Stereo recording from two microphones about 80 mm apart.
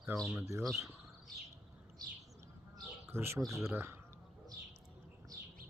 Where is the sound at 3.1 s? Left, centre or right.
Right.